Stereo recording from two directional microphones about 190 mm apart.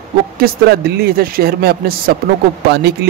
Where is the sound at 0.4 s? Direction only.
55° right (ahead or behind).